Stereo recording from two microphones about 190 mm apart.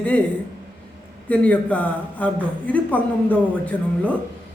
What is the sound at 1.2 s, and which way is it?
A man's voice, 5° left (ahead or behind).